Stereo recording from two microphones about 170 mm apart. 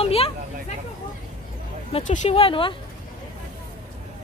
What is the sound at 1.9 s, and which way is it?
Speech, 45° left (ahead or behind).